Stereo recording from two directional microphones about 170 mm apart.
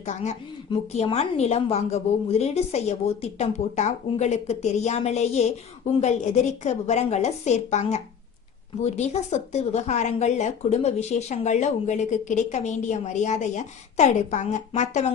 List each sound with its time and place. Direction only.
0.0 s a woman's voice: 45° left (ahead or behind)